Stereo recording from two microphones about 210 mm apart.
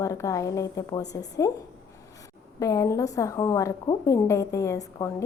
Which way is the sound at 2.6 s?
15° left (ahead or behind).